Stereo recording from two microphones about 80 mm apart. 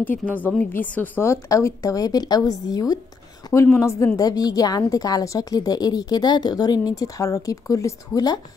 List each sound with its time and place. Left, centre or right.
0.0 s a woman's voice: left
1.2 s a woman's voice: left
3.8 s speech: left
4.3 s a woman's voice: left